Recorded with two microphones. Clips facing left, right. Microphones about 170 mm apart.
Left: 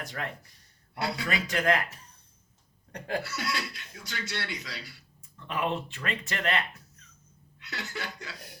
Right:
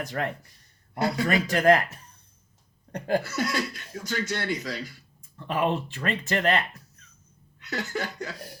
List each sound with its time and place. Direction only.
0.2 s speech: 45° right (ahead or behind)
2.9 s speech: 40° right (ahead or behind)
7.6 s speech: 45° right (ahead or behind)